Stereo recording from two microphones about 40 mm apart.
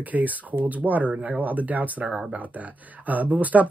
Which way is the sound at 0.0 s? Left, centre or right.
Right.